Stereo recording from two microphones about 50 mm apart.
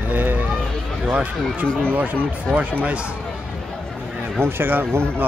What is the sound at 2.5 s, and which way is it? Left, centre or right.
Speech, centre.